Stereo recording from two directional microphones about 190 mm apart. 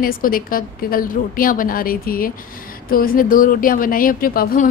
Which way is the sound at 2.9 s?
50° left (ahead or behind).